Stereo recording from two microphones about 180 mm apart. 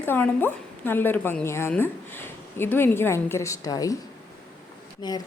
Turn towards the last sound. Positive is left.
turn(degrees=20)  # may be behind; listen again after turning